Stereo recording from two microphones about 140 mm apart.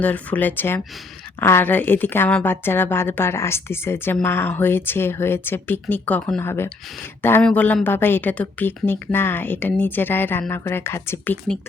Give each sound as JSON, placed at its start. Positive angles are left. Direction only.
{"t": 0.0, "sound": "a woman's voice", "side_deg": 10}